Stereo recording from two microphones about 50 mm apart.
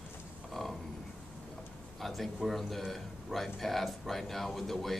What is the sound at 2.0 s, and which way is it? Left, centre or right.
A man's voice, centre.